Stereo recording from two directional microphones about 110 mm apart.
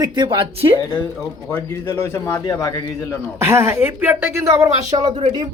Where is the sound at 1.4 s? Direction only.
20° left (ahead or behind).